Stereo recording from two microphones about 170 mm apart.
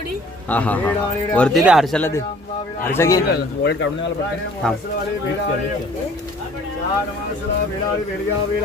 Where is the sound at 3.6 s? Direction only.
90° left.